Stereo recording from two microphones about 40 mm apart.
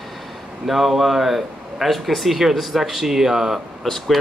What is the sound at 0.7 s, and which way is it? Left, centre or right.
Speech, centre.